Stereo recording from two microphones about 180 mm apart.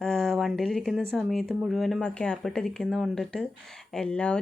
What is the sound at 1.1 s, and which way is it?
Speech, centre (ahead or behind).